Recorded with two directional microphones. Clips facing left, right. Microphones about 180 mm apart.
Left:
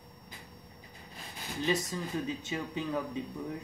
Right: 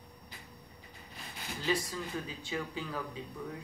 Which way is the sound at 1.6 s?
20° left (ahead or behind).